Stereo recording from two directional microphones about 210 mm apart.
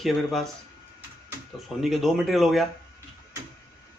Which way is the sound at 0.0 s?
Centre (ahead or behind).